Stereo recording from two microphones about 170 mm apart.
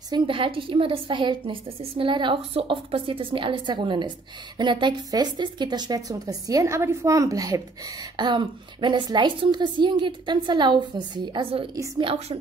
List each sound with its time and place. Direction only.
0.1 s a woman's voice: 30° right (ahead or behind)